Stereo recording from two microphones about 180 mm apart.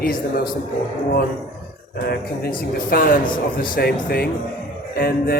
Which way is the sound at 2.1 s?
55° left (ahead or behind).